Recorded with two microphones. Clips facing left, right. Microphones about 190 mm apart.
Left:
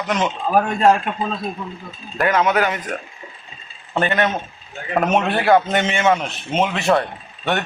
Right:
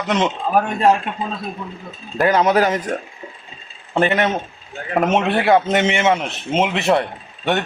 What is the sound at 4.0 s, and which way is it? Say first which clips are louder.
A man's voice: right 2 dB; 25° right (ahead or behind).